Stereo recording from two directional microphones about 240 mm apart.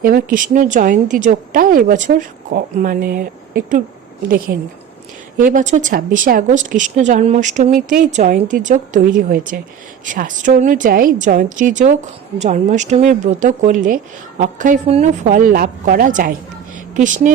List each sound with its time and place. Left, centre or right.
0.0 s speech: right